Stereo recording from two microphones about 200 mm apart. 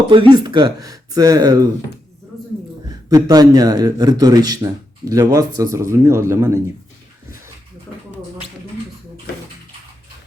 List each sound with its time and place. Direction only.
0.1 s speech: 25° right (ahead or behind)
3.1 s a man's voice: 20° right (ahead or behind)